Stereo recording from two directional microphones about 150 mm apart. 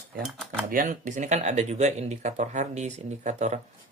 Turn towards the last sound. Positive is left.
turn(degrees=-50)  # may be behind; listen again after turning